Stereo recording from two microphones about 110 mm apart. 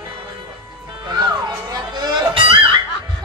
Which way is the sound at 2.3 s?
50° right (ahead or behind).